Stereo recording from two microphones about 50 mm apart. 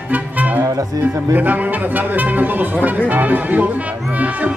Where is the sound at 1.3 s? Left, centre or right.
Right.